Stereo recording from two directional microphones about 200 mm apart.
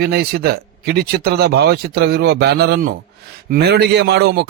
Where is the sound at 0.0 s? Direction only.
50° right (ahead or behind).